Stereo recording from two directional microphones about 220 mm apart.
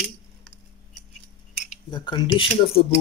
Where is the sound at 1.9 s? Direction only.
20° left (ahead or behind).